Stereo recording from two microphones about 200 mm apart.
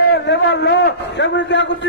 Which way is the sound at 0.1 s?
60° left (ahead or behind).